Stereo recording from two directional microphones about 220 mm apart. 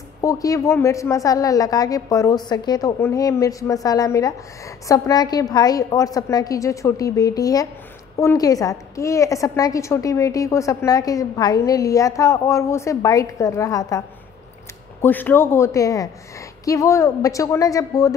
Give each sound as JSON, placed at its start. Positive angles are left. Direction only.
{"t": 0.2, "sound": "a woman's voice", "side_deg": 15}